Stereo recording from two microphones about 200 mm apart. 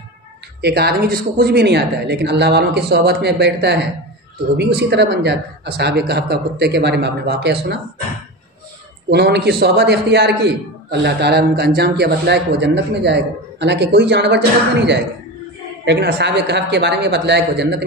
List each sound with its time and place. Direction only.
0.6 s a man's voice: 55° right (ahead or behind)
9.1 s a man's voice: 55° right (ahead or behind)